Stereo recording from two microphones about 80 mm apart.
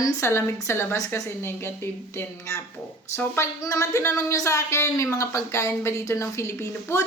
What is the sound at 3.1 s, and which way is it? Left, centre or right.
A woman's voice, left.